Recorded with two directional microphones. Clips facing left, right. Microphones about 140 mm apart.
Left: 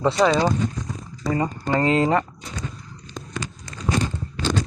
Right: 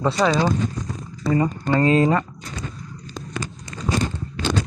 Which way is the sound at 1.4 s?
20° left (ahead or behind).